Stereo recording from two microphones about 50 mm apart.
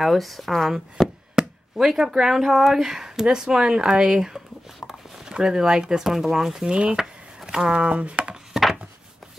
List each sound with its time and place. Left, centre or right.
0.0 s speech: centre
1.3 s speech: centre
6.7 s speech: right
7.0 s a sound: centre
7.7 s speech: right